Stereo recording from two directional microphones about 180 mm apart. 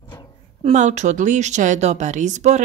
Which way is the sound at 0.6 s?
40° right (ahead or behind).